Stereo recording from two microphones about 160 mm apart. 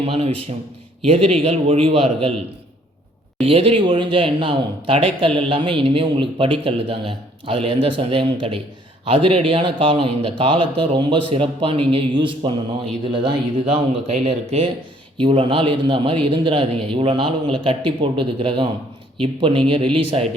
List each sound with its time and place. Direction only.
0.0 s a man's voice: 40° right (ahead or behind)
3.4 s a man's voice: 35° right (ahead or behind)